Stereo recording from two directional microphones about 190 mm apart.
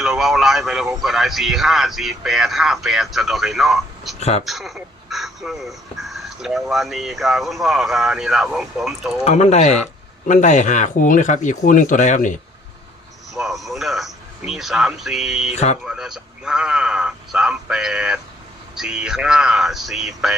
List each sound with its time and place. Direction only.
0.0 s speech: centre (ahead or behind)
4.2 s speech: 35° left (ahead or behind)
4.4 s speech: centre (ahead or behind)
9.2 s speech: 35° left (ahead or behind)
13.3 s speech: centre (ahead or behind)
15.5 s speech: 35° left (ahead or behind)
15.9 s speech: 5° right (ahead or behind)